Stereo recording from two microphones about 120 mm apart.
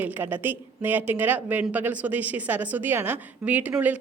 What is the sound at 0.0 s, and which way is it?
A woman's voice, 15° right (ahead or behind).